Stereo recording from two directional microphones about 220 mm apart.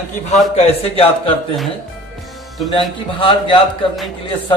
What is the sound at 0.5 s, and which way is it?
A man's voice, 25° left (ahead or behind).